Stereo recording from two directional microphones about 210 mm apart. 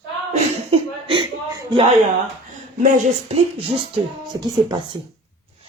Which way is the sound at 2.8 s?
35° right (ahead or behind).